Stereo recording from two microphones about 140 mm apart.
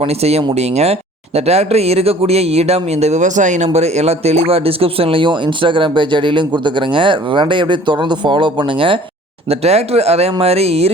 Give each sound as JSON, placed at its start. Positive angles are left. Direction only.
{"t": 0.0, "sound": "speech", "side_deg": -50}
{"t": 9.5, "sound": "speech", "side_deg": -50}